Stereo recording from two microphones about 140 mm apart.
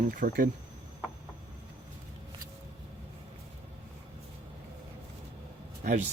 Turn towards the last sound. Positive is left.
turn(degrees=-55)  # may be behind; listen again after turning